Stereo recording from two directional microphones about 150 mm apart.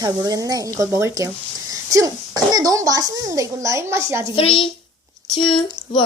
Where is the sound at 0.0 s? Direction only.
25° right (ahead or behind).